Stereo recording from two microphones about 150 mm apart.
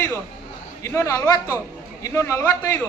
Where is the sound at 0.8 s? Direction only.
20° left (ahead or behind).